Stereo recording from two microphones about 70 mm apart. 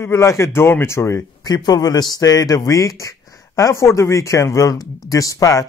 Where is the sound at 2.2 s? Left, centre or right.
Left.